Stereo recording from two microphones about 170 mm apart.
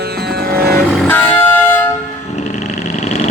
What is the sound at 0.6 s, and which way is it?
Vehicle, 65° right (ahead or behind).